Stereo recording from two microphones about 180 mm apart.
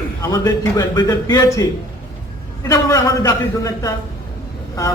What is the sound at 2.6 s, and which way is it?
A man's voice, 20° left (ahead or behind).